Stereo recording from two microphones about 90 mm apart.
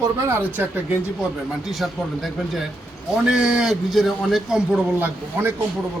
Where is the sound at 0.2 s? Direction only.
30° right (ahead or behind).